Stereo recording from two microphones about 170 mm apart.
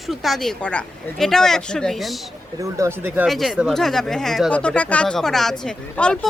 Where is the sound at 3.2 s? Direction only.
Centre (ahead or behind).